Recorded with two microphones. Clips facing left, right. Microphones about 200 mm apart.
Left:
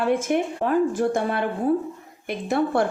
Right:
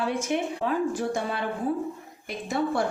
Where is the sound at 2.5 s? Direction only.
60° left (ahead or behind).